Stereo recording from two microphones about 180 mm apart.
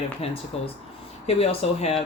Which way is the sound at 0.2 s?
35° left (ahead or behind).